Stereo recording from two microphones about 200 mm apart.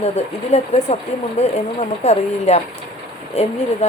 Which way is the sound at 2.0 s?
35° left (ahead or behind).